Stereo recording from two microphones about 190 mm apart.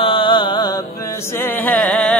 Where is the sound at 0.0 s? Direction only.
25° left (ahead or behind).